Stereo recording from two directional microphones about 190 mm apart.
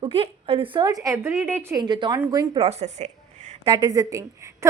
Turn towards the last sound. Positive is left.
turn(degrees=-15)  # may be behind; listen again after turning